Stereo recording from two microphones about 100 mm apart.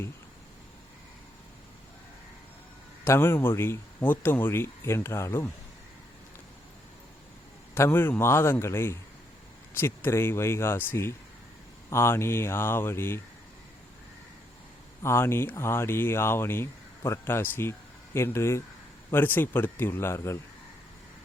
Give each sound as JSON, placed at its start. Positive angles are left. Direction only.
{"t": 3.0, "sound": "speech", "side_deg": 25}
{"t": 7.8, "sound": "speech", "side_deg": 20}
{"t": 15.0, "sound": "speech", "side_deg": 25}